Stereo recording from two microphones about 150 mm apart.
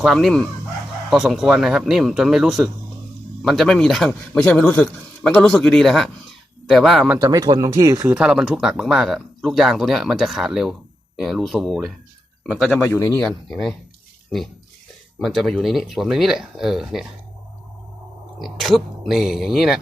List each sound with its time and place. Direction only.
0.0 s a man's voice: centre (ahead or behind)
7.2 s speech: 25° right (ahead or behind)
8.1 s a man's voice: 5° right (ahead or behind)
12.6 s speech: 10° left (ahead or behind)
13.1 s a man's voice: 5° left (ahead or behind)
15.2 s a man's voice: centre (ahead or behind)
18.3 s a man's voice: centre (ahead or behind)